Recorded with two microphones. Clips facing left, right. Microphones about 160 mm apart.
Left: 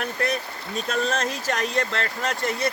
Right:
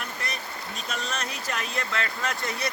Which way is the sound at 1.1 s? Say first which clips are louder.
Left 7 dB; 90° left.